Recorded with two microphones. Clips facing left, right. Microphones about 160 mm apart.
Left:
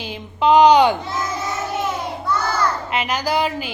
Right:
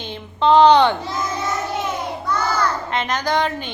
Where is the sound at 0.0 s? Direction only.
10° left (ahead or behind).